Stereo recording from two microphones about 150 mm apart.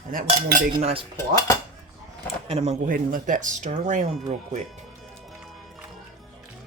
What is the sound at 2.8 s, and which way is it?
Speech, 65° right (ahead or behind).